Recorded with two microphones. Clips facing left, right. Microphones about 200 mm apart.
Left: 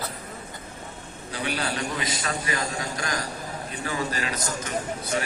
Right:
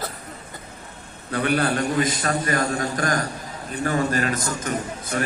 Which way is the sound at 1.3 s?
55° right (ahead or behind).